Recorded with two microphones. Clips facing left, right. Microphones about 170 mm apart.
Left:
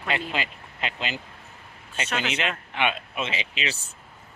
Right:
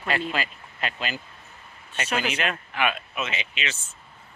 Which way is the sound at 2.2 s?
25° left (ahead or behind).